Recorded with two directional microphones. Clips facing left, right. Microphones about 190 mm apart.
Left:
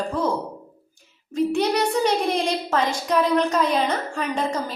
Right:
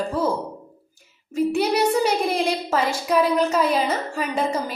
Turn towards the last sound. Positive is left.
turn(degrees=-5)  # may be behind; listen again after turning